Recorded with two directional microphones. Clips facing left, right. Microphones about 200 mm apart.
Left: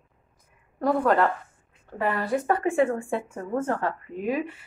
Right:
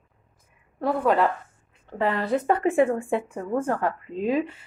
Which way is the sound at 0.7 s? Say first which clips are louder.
Even; 5° right (ahead or behind).